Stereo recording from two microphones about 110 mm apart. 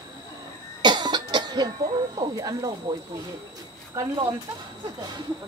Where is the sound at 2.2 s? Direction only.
35° right (ahead or behind).